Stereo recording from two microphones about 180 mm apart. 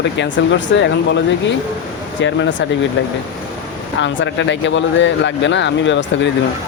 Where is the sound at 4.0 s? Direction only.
90° left.